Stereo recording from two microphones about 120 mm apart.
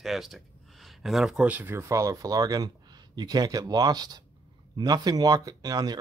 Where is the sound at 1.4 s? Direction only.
15° right (ahead or behind).